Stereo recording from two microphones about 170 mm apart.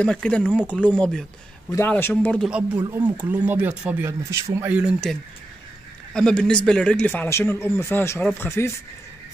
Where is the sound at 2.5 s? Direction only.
10° right (ahead or behind).